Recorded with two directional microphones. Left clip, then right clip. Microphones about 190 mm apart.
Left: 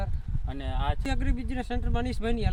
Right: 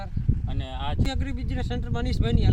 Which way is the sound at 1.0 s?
15° left (ahead or behind).